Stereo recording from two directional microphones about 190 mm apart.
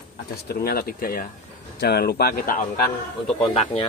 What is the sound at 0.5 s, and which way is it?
Speech, 55° left (ahead or behind).